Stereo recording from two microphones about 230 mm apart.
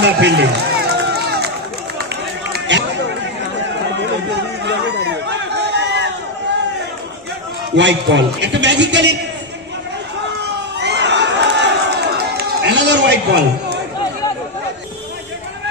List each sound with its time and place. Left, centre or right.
0.0 s run: right
2.7 s chatter: right
5.0 s run: right
7.7 s a man's voice: right
10.4 s crowd: right